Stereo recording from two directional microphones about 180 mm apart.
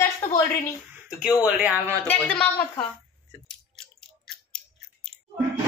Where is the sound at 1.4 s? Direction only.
5° right (ahead or behind).